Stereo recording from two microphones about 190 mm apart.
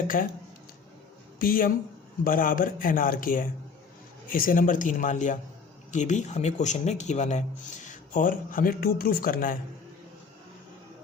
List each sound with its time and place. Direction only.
0.1 s speech: 45° left (ahead or behind)
1.4 s speech: 50° left (ahead or behind)